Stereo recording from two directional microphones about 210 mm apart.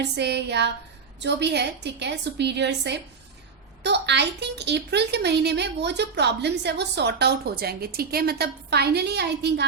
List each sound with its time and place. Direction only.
0.0 s speech: 55° right (ahead or behind)